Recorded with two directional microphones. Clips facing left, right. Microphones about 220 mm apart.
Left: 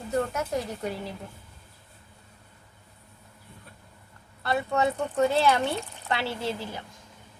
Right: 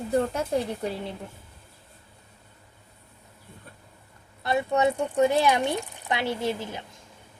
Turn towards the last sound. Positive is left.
turn(degrees=-20)  # may be behind; listen again after turning